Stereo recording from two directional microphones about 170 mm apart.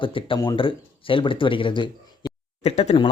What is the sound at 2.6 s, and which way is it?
Speech, 40° left (ahead or behind).